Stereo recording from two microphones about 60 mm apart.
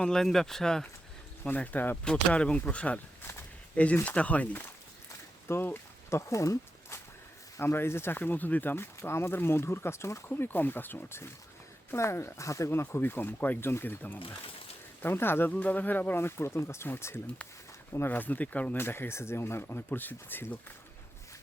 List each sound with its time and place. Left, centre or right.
0.0 s speech: centre
1.5 s speech: left
2.0 s speech: centre
4.0 s speech: left
5.5 s a sound: left
7.6 s speech: left
8.2 s speech: left
10.2 s speech: left
15.5 s speech: left
18.8 s speech: left